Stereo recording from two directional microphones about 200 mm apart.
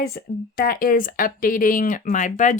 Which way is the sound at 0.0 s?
50° left (ahead or behind).